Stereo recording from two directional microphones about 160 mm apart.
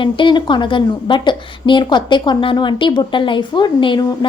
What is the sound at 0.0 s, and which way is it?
A woman's voice, 30° left (ahead or behind).